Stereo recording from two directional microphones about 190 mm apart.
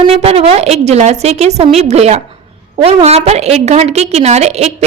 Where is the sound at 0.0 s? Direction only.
30° right (ahead or behind).